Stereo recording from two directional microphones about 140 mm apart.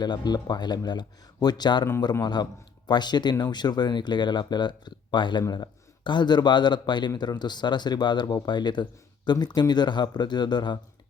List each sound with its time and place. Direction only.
0.0 s speech: 30° left (ahead or behind)